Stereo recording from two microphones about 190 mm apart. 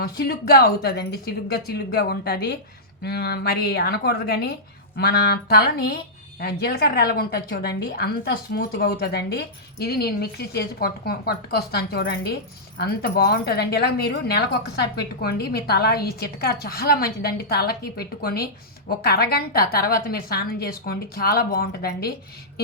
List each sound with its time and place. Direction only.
0.0 s a woman's voice: 55° left (ahead or behind)